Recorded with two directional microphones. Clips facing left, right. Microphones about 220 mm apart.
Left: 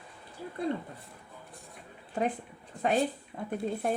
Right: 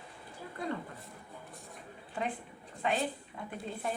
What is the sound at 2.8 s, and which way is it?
A woman's voice, 45° left (ahead or behind).